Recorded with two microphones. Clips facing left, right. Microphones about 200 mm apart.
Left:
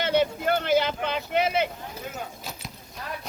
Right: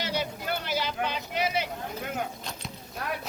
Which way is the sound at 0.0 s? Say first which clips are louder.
Left 8 dB; 55° left (ahead or behind).